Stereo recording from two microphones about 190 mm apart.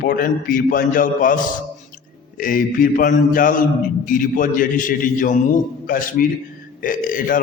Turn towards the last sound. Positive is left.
turn(degrees=45)  # may be behind; listen again after turning